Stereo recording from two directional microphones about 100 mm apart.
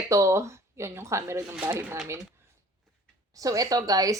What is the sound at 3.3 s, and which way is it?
Speech, 35° right (ahead or behind).